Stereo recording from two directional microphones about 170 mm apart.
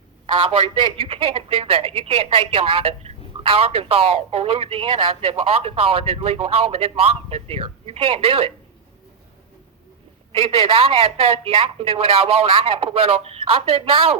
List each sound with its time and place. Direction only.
0.3 s speech: 30° right (ahead or behind)
10.3 s speech: 35° right (ahead or behind)